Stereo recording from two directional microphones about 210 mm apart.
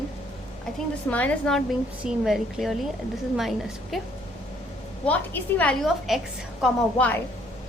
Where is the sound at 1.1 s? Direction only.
5° left (ahead or behind).